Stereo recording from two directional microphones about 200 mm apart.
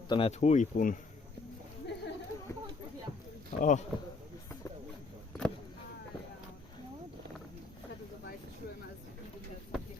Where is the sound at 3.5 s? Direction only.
35° left (ahead or behind).